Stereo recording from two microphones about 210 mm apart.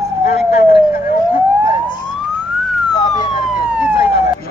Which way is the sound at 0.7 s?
45° left (ahead or behind).